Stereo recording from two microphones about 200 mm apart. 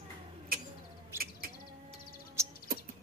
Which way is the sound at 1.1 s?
15° right (ahead or behind).